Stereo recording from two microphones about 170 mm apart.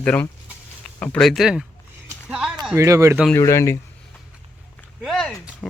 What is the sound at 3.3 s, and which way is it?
Speech, 15° left (ahead or behind).